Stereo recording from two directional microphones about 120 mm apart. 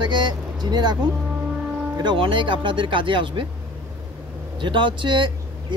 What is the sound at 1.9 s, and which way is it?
Speech, 45° right (ahead or behind).